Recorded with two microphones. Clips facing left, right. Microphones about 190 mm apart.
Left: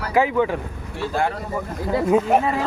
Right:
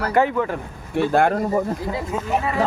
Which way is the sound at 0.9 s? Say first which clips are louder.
Right 6 dB; 55° right (ahead or behind).